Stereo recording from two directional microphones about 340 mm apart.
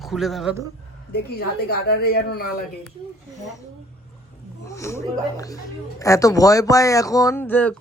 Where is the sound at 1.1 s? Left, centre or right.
Left.